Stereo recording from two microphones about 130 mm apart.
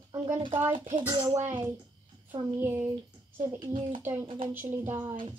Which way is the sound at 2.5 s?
20° right (ahead or behind).